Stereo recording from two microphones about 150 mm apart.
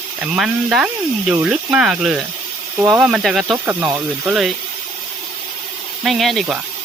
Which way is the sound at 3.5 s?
15° right (ahead or behind).